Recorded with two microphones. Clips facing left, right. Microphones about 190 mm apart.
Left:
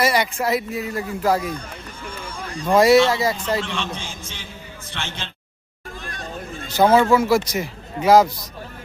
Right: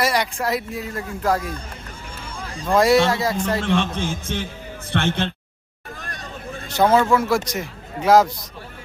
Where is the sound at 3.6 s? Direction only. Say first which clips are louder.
Right 6 dB; 55° right (ahead or behind).